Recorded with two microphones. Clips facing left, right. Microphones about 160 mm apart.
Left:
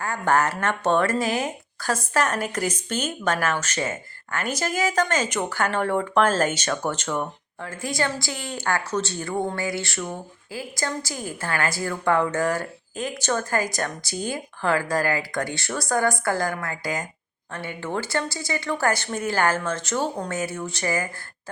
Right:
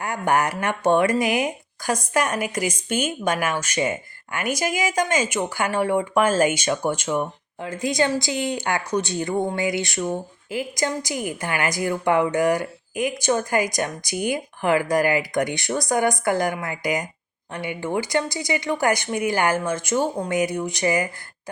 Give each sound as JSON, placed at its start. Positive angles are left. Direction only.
{"t": 0.0, "sound": "speech", "side_deg": -15}